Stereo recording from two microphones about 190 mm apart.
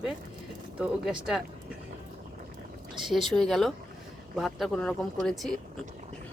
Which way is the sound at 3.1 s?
Centre (ahead or behind).